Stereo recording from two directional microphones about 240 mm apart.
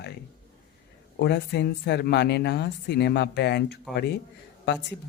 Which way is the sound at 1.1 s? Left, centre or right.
Left.